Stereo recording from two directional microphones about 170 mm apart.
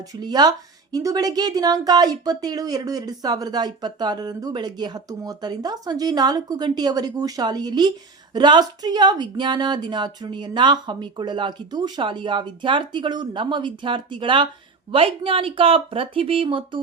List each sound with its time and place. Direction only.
0.2 s a woman's voice: 25° right (ahead or behind)